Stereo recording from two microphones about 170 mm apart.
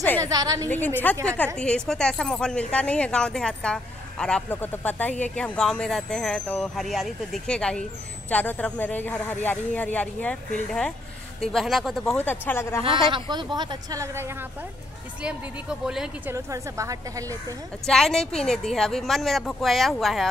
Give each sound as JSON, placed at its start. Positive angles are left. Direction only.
{"t": 0.2, "sound": "speech", "side_deg": -20}
{"t": 0.7, "sound": "speech", "side_deg": 10}
{"t": 11.4, "sound": "speech", "side_deg": 0}
{"t": 13.1, "sound": "speech", "side_deg": -25}
{"t": 15.2, "sound": "speech", "side_deg": -5}
{"t": 16.3, "sound": "speech", "side_deg": -20}
{"t": 17.8, "sound": "speech", "side_deg": 5}